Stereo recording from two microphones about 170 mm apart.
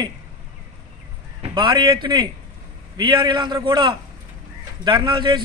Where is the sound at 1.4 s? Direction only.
30° right (ahead or behind).